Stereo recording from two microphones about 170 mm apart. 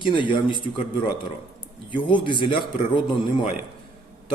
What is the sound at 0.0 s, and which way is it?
Speech, 30° left (ahead or behind).